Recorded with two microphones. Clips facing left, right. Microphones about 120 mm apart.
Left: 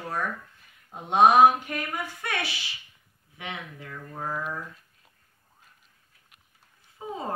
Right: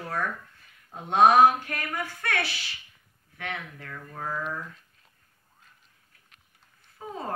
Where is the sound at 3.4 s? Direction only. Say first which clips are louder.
Right 1 dB; 15° left (ahead or behind).